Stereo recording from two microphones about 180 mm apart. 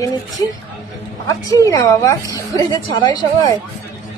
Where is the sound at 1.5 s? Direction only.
20° left (ahead or behind).